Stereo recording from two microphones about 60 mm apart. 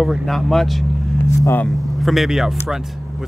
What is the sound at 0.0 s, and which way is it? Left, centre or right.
Speech, centre.